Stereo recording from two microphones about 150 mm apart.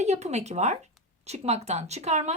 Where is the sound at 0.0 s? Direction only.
50° right (ahead or behind).